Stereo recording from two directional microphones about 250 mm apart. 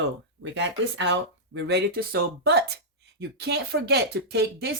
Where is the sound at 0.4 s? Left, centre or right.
Right.